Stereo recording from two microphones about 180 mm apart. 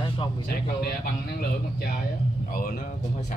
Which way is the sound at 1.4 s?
60° left (ahead or behind).